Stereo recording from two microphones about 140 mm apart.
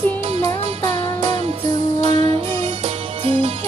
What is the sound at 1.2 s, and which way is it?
Music, 45° right (ahead or behind).